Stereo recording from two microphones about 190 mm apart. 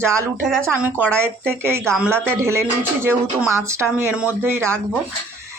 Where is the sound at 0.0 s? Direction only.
15° right (ahead or behind).